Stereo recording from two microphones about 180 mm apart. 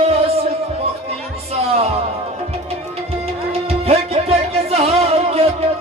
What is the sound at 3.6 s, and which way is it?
Music, 35° right (ahead or behind).